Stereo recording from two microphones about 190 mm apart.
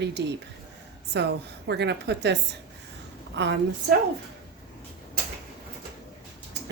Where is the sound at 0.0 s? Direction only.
65° right (ahead or behind).